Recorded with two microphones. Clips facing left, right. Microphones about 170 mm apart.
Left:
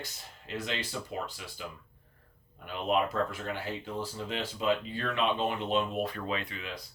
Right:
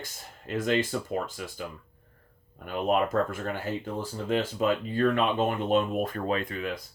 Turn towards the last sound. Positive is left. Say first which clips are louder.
# right 6 dB
turn(degrees=-50)  # may be behind; listen again after turning